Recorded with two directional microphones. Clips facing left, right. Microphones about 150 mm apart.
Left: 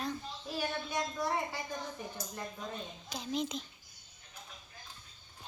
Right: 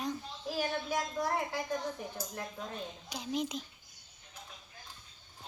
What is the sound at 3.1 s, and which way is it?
Speech, 10° right (ahead or behind).